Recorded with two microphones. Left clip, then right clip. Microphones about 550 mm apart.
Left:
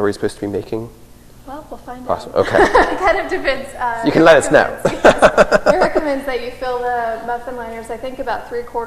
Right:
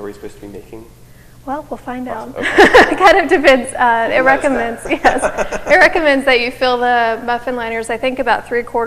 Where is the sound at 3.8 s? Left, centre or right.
Right.